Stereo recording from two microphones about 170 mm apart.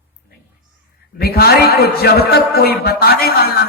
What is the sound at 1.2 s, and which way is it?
A man's voice, 70° left (ahead or behind).